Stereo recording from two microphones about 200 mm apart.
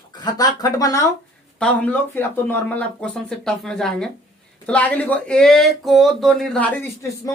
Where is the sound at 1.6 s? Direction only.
5° left (ahead or behind).